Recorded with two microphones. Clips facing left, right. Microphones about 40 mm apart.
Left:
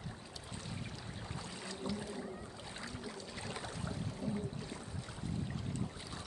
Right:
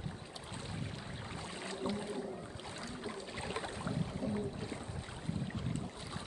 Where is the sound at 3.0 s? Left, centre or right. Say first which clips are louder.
Right 3 dB; right.